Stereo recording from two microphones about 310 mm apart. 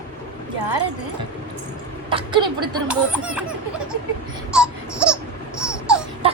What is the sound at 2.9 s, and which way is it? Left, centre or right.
Speech, centre.